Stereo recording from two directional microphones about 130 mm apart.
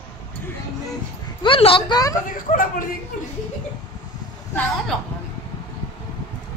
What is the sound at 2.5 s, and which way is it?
Speech, 90° left.